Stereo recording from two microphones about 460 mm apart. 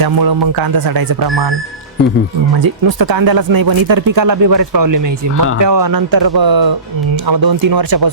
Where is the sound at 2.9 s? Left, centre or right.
Right.